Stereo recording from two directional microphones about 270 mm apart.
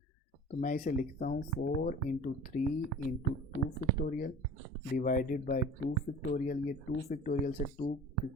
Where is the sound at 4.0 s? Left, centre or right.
Left.